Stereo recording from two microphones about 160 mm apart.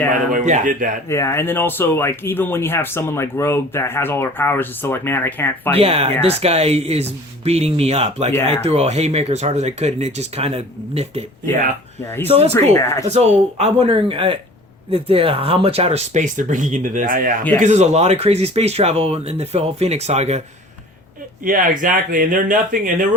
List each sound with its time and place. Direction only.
0.3 s speech: 50° right (ahead or behind)
1.0 s speech: 15° left (ahead or behind)
5.7 s speech: 35° right (ahead or behind)
12.0 s speech: 15° left (ahead or behind)
12.3 s speech: 40° right (ahead or behind)
12.7 s speech: 15° left (ahead or behind)
13.1 s speech: 40° right (ahead or behind); by 17.3 s 60° right (ahead or behind)
17.6 s speech: 45° right (ahead or behind)
21.4 s speech: 55° right (ahead or behind)